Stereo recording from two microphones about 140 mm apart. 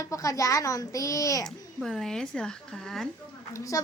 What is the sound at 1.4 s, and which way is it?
A woman's voice, 5° left (ahead or behind).